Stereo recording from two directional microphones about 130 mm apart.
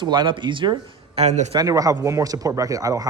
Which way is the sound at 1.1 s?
60° right (ahead or behind).